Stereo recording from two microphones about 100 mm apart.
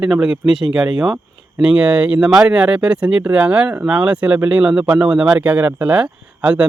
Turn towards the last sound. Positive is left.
turn(degrees=-15)  # may be behind; listen again after turning